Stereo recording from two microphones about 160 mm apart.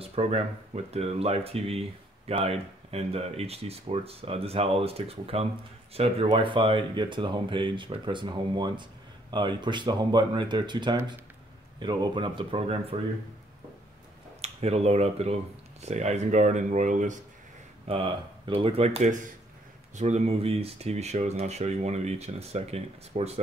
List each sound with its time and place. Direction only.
0.0 s speech: 40° right (ahead or behind)
14.4 s speech: 40° right (ahead or behind)
17.8 s speech: 35° right (ahead or behind)